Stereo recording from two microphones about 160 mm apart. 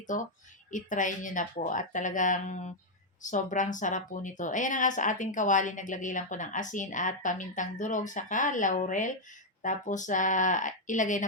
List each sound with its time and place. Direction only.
0.1 s speech: 50° left (ahead or behind)